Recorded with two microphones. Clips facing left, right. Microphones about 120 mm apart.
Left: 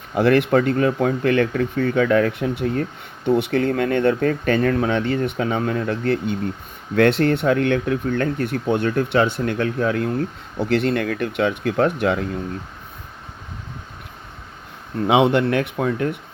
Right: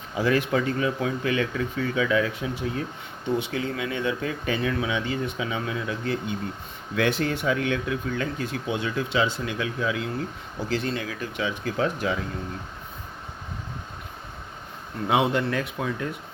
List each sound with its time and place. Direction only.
0.1 s speech: 65° left (ahead or behind)
10.6 s speech: 65° left (ahead or behind)
15.0 s speech: 65° left (ahead or behind)